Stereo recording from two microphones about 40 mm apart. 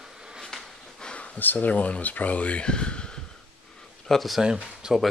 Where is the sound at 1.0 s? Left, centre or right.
Left.